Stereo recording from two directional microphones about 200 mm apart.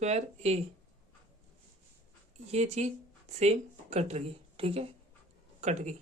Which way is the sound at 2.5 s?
35° right (ahead or behind).